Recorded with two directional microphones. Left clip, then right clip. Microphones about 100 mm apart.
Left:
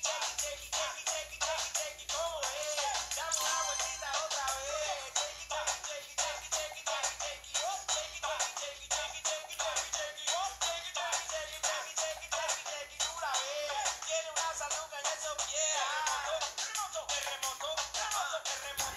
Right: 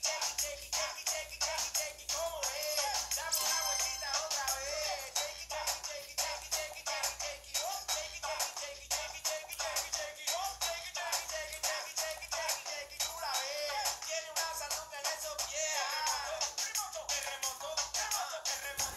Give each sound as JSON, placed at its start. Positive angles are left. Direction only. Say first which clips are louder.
{"t": 0.7, "sound": "music", "louder": "left 1 dB", "side_deg": -40}